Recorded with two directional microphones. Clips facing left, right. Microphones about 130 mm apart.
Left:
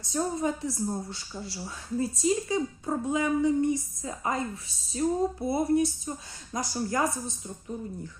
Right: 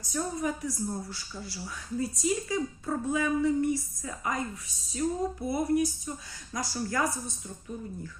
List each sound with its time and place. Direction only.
0.0 s a woman's voice: 25° left (ahead or behind)